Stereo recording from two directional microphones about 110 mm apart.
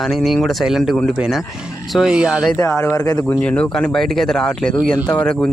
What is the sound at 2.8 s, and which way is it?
Speech, 20° left (ahead or behind).